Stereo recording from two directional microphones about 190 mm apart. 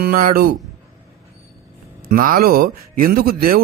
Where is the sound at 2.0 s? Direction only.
50° right (ahead or behind).